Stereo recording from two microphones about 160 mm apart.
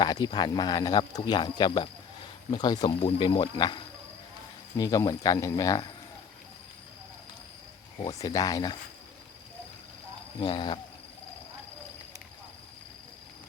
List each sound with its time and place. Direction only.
0.0 s speech: 25° left (ahead or behind)
4.8 s speech: 25° left (ahead or behind)
7.9 s speech: 25° left (ahead or behind)
10.4 s speech: 30° left (ahead or behind)